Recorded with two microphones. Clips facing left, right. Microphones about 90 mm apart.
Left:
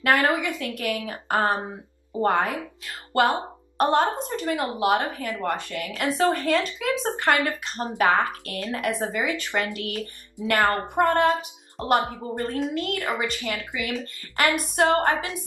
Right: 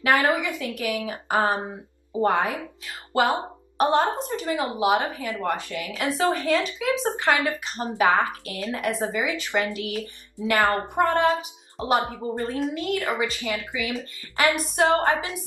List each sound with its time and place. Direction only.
0.1 s a woman's voice: 15° right (ahead or behind)
4.3 s a woman's voice: 15° right (ahead or behind)
5.9 s speech: centre (ahead or behind)
7.4 s a woman's voice: 15° right (ahead or behind)
9.5 s a woman's voice: 20° right (ahead or behind)
9.8 s speech: 5° right (ahead or behind)
10.6 s a woman's voice: 15° right (ahead or behind)
11.1 s speech: centre (ahead or behind)
12.0 s a woman's voice: 20° right (ahead or behind)
12.4 s speech: 5° right (ahead or behind)
13.2 s a woman's voice: 15° right (ahead or behind)
13.7 s speech: 5° right (ahead or behind)
14.9 s a woman's voice: 15° right (ahead or behind)